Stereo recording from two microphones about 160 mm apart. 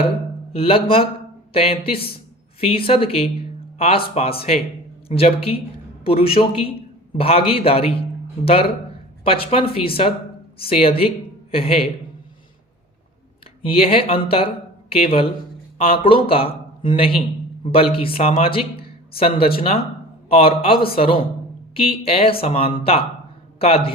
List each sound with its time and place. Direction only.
0.5 s speech: 35° left (ahead or behind)
9.2 s speech: 35° left (ahead or behind)
13.7 s speech: 35° left (ahead or behind)